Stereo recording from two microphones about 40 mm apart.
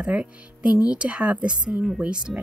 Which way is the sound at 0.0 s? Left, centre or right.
Right.